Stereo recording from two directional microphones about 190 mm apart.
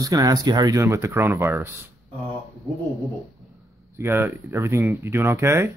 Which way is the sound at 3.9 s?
15° right (ahead or behind).